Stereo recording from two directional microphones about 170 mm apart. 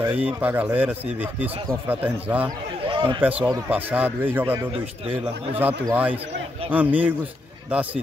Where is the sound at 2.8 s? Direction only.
30° right (ahead or behind).